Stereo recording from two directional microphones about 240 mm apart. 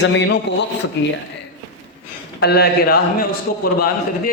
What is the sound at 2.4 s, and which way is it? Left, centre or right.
A man's voice, left.